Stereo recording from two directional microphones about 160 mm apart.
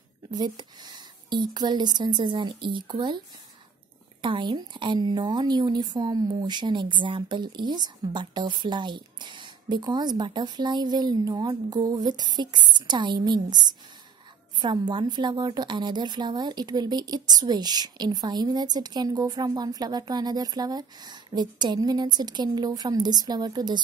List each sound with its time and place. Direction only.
0.3 s a woman's voice: 25° right (ahead or behind)
4.2 s a woman's voice: 30° right (ahead or behind)